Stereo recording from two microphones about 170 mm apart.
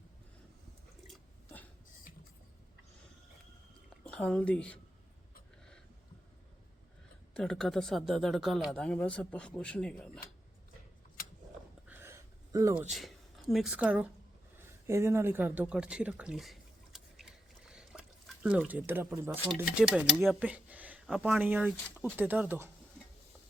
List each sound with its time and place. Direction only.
4.0 s a woman's voice: 5° left (ahead or behind)
7.3 s speech: 5° left (ahead or behind)
11.9 s a sound: 15° right (ahead or behind)
12.9 s speech: centre (ahead or behind)
17.7 s a sound: 5° right (ahead or behind)
19.5 s speech: 5° right (ahead or behind)